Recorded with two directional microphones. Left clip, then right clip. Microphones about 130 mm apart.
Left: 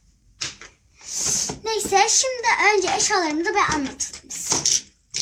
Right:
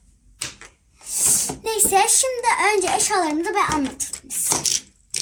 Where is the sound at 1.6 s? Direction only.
40° right (ahead or behind).